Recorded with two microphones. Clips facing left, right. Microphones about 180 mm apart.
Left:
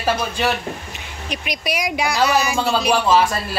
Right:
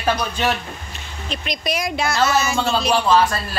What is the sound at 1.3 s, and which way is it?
Speech, 10° left (ahead or behind).